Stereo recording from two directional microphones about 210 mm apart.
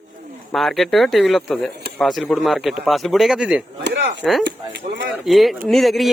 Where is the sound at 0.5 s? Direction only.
Centre (ahead or behind).